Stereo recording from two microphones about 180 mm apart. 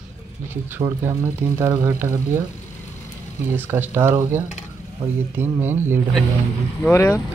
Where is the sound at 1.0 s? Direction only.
15° right (ahead or behind).